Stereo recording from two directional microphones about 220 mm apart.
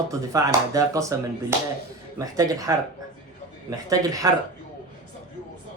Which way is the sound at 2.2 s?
15° right (ahead or behind).